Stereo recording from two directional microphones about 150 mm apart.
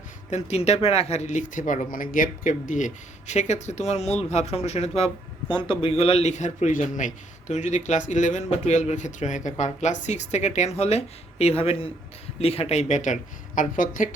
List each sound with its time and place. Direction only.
0.3 s a man's voice: 50° left (ahead or behind)
5.5 s a man's voice: 35° left (ahead or behind); by 14.2 s 60° left (ahead or behind)